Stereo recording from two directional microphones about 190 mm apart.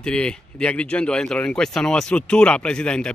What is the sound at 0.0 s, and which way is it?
Speech, 5° left (ahead or behind).